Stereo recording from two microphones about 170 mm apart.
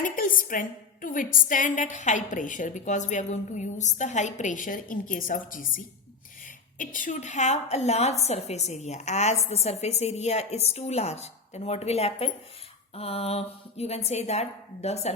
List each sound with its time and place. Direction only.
0.0 s a woman's voice: 55° left (ahead or behind)